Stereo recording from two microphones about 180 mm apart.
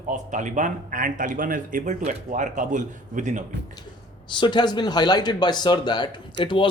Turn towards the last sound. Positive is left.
turn(degrees=25)  # may be behind; listen again after turning